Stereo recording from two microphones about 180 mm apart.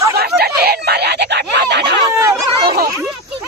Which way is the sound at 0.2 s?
60° right (ahead or behind).